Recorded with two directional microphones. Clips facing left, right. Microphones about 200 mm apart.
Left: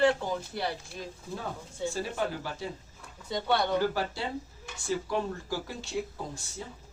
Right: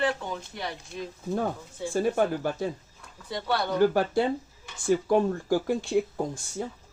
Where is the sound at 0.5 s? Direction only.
30° left (ahead or behind).